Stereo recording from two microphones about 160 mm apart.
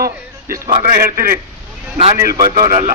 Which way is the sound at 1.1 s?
65° right (ahead or behind).